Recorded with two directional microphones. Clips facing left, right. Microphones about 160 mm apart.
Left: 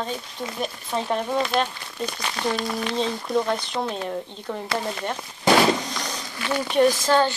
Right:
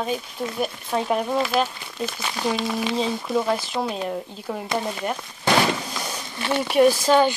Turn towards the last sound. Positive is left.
turn(degrees=-15)  # may be behind; listen again after turning